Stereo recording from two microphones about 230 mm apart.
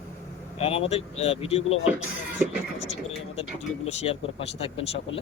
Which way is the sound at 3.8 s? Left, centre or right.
Left.